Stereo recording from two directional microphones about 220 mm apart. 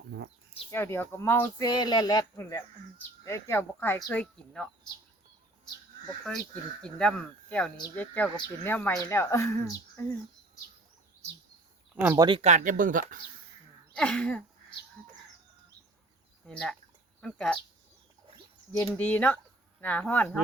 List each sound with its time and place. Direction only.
0.7 s speech: 10° left (ahead or behind)
6.8 s speech: 5° left (ahead or behind)
11.9 s speech: 10° right (ahead or behind)
12.4 s speech: 35° right (ahead or behind)
13.9 s speech: 5° left (ahead or behind)
16.5 s speech: 5° left (ahead or behind)
18.8 s speech: 5° left (ahead or behind)